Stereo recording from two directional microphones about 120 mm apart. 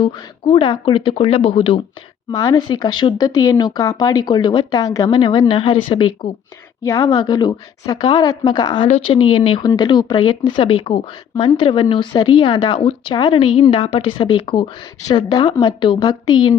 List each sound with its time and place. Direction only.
0.0 s speech: 45° left (ahead or behind)
2.3 s speech: 25° left (ahead or behind)
2.6 s speech: 35° left (ahead or behind)
5.1 s speech: 45° left (ahead or behind)
8.9 s speech: 50° left (ahead or behind)